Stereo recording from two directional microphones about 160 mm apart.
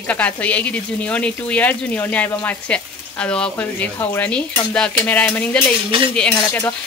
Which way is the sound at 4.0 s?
20° left (ahead or behind).